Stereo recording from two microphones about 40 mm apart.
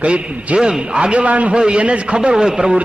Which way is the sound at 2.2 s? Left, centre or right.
Centre.